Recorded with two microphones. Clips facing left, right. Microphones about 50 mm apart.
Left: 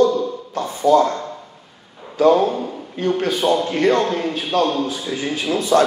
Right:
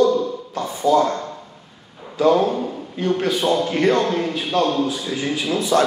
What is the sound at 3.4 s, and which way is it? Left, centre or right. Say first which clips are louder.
Speech: left 1 dB; centre.